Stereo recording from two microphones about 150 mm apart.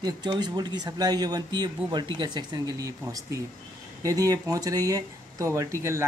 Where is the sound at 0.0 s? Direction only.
30° right (ahead or behind).